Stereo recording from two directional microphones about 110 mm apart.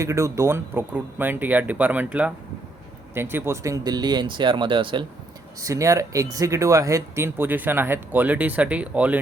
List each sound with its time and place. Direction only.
0.0 s speech: 30° right (ahead or behind); by 5.0 s 50° right (ahead or behind)
5.5 s speech: 30° right (ahead or behind); by 9.1 s 15° right (ahead or behind)